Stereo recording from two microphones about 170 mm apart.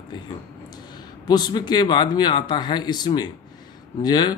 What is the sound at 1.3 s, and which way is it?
Speech, 25° left (ahead or behind).